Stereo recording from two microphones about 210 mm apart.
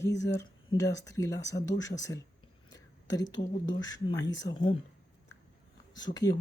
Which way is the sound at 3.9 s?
20° left (ahead or behind).